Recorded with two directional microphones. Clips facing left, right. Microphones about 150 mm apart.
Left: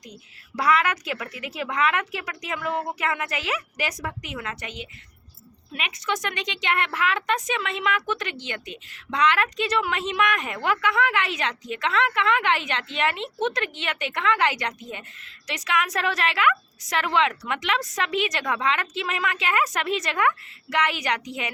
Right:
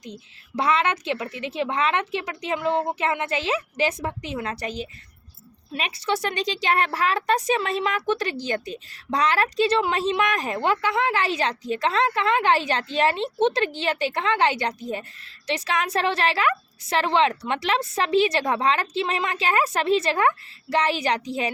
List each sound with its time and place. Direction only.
0.0 s a woman's voice: 25° right (ahead or behind)